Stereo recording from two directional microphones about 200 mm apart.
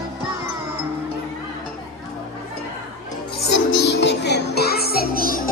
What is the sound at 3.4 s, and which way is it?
Music, 55° left (ahead or behind).